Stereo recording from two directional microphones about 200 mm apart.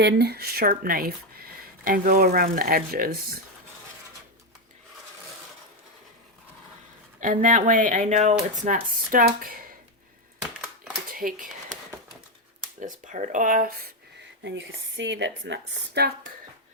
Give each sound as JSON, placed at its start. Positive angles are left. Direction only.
{"t": 0.0, "sound": "speech", "side_deg": -55}
{"t": 7.2, "sound": "speech", "side_deg": -40}
{"t": 11.1, "sound": "a sound", "side_deg": -45}
{"t": 12.8, "sound": "speech", "side_deg": -40}
{"t": 14.4, "sound": "speech", "side_deg": -65}